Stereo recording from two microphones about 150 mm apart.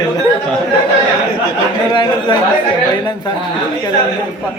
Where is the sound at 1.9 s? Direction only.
30° left (ahead or behind).